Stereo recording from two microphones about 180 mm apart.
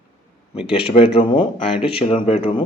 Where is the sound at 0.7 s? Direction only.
30° left (ahead or behind).